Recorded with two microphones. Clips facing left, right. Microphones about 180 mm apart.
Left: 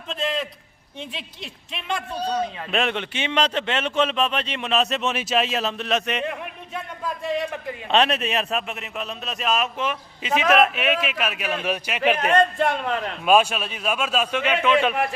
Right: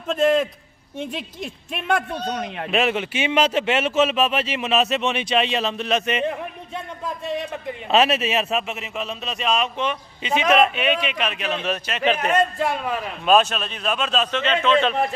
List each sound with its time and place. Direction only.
0.1 s speech: 50° right (ahead or behind)
2.7 s a man's voice: 5° right (ahead or behind)
7.9 s a man's voice: 5° right (ahead or behind)
12.3 s a man's voice: 5° right (ahead or behind)
13.2 s a man's voice: 10° left (ahead or behind)